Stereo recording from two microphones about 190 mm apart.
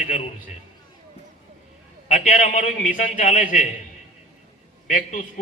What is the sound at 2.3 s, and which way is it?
Speech, 45° left (ahead or behind).